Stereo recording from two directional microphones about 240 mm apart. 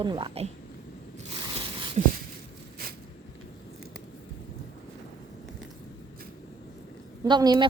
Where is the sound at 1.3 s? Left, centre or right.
Right.